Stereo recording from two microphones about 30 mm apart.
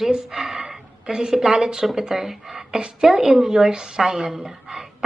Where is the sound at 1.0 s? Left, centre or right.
Right.